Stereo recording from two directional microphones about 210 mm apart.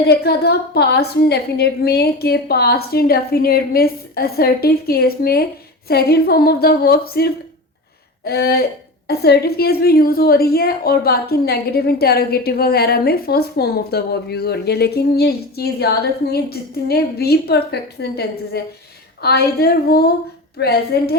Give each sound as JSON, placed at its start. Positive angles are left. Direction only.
{"t": 0.1, "sound": "a woman's voice", "side_deg": 50}